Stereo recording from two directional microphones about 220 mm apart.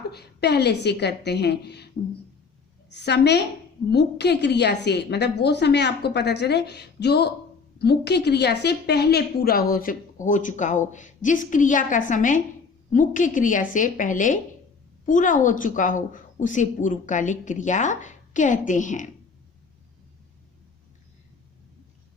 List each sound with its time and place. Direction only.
0.1 s a woman's voice: 50° left (ahead or behind)
2.9 s a woman's voice: 50° left (ahead or behind)